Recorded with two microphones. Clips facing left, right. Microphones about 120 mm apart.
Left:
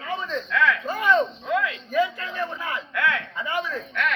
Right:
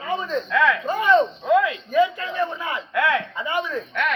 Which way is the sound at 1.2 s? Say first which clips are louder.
Right 6 dB; 25° right (ahead or behind).